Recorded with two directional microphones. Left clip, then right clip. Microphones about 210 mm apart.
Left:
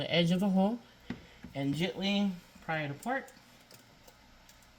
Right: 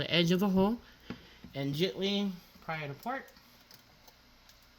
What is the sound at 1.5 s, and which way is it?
Speech, 50° right (ahead or behind).